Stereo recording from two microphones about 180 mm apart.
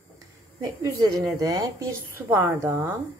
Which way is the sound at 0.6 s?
20° right (ahead or behind).